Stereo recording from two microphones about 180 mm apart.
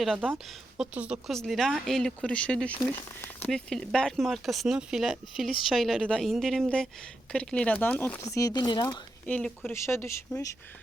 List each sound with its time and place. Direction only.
0.0 s speech: centre (ahead or behind)
8.4 s speech: 20° left (ahead or behind)
9.2 s speech: 5° left (ahead or behind)